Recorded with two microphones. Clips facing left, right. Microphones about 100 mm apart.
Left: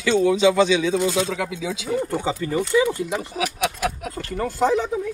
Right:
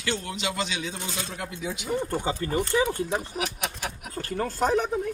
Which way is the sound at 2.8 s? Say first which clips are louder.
Left 3 dB; 75° left (ahead or behind).